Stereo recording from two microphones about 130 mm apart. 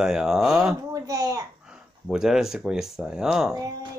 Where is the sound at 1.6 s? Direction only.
5° right (ahead or behind).